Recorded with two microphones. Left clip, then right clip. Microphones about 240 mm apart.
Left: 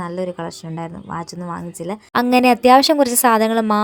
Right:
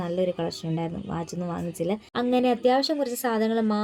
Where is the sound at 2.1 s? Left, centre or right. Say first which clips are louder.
Left 11 dB; left.